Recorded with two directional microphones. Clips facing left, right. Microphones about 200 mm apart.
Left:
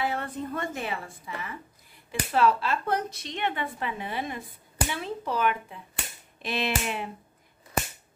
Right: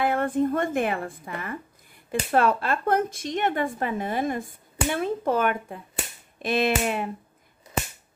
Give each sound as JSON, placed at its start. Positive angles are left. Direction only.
{"t": 0.0, "sound": "speech", "side_deg": -50}